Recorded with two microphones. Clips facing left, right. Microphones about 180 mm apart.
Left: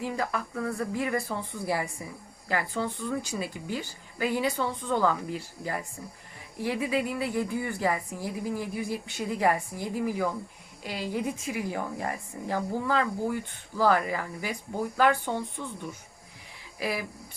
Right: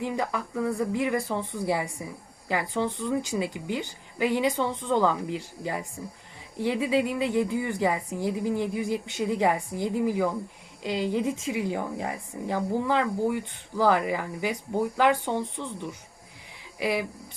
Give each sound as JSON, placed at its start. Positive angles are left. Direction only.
{"t": 0.0, "sound": "a woman's voice", "side_deg": -20}